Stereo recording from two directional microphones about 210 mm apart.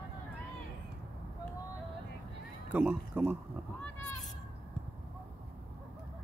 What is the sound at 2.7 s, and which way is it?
Speech, 5° right (ahead or behind).